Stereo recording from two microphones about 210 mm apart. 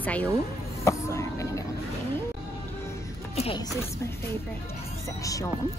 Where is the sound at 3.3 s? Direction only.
30° left (ahead or behind).